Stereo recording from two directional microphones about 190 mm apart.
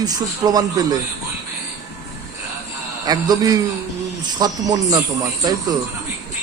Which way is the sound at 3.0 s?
20° right (ahead or behind).